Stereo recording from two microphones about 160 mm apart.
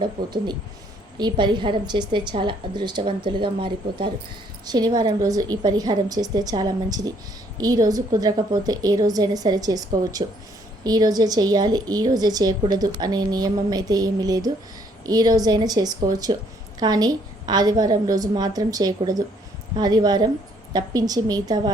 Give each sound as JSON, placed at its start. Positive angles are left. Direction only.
{"t": 0.2, "sound": "speech", "side_deg": -75}
{"t": 1.2, "sound": "a woman's voice", "side_deg": -30}